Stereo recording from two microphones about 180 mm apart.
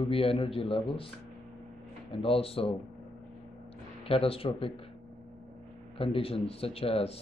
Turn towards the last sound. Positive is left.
turn(degrees=35)  # may be behind; listen again after turning